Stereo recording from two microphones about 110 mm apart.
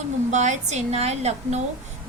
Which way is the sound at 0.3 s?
90° right.